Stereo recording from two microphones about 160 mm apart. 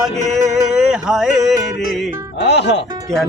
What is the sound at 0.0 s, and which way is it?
Music, centre (ahead or behind).